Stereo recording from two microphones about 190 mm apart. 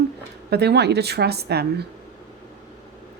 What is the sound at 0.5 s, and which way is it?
A woman's voice, 60° right (ahead or behind).